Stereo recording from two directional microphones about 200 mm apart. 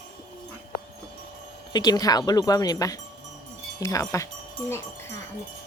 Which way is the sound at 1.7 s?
20° left (ahead or behind).